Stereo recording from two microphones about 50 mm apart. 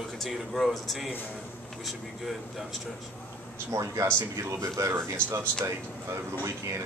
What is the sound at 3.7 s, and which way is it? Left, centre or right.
Speech, right.